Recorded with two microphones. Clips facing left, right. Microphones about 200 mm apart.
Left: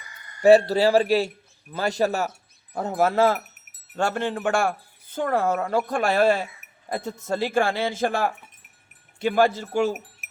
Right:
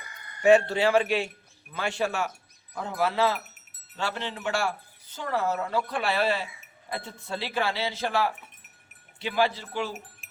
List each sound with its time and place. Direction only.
0.4 s speech: 35° left (ahead or behind)